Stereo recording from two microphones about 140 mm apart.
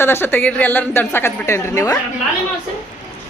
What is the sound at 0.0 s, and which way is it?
A woman's voice, 15° left (ahead or behind).